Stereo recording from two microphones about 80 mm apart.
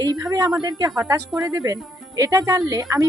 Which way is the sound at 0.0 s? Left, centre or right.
Right.